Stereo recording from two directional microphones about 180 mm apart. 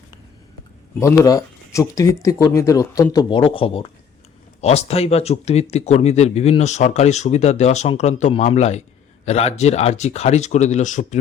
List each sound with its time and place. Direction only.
0.9 s speech: 15° left (ahead or behind); by 11.2 s 40° left (ahead or behind)